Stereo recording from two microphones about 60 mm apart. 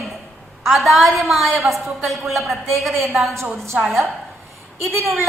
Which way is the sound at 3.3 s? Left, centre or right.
Right.